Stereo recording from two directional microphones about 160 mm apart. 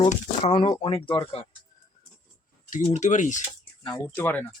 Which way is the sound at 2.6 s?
55° left (ahead or behind).